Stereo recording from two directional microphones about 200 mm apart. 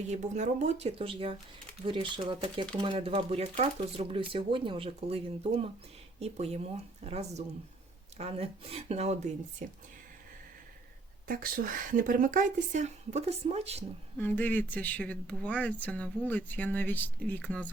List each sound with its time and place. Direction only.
0.1 s a woman's voice: 35° right (ahead or behind)
11.3 s a woman's voice: 45° right (ahead or behind)
14.2 s speech: 10° left (ahead or behind)